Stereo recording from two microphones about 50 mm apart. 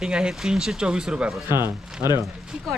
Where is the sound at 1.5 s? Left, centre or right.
Right.